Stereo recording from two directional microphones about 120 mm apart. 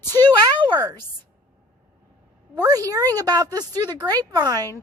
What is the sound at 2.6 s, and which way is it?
Speech, 30° right (ahead or behind).